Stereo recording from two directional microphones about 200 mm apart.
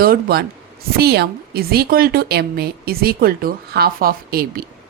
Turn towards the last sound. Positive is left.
turn(degrees=-50)  # may be behind; listen again after turning